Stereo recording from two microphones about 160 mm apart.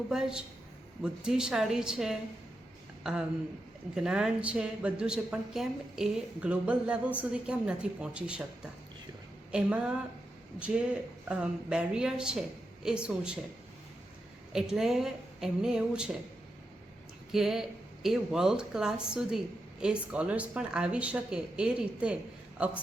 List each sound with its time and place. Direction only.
0.1 s a woman's voice: 5° right (ahead or behind)
14.5 s speech: 5° right (ahead or behind)
17.3 s a woman's voice: centre (ahead or behind)